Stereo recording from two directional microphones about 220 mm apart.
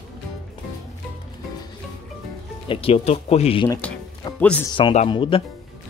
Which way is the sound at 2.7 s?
25° left (ahead or behind).